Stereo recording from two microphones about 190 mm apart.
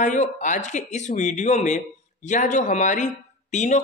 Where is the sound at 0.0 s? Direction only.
40° left (ahead or behind).